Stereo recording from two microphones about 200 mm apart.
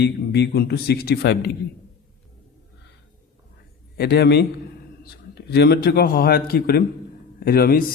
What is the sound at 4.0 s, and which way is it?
A man's voice, 55° left (ahead or behind).